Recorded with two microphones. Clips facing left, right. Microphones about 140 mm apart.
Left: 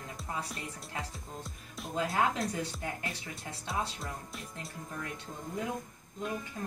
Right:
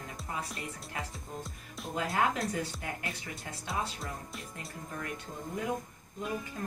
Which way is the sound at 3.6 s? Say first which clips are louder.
Even; centre (ahead or behind).